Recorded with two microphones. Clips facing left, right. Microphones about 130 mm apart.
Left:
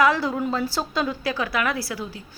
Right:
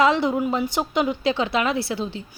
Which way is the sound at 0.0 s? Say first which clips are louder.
Right 2 dB; 20° right (ahead or behind).